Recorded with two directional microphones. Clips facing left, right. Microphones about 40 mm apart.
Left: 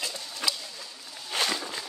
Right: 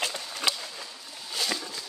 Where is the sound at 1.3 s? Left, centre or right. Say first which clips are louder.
Left 4 dB; left.